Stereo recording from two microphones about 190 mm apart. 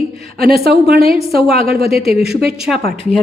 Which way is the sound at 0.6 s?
55° right (ahead or behind).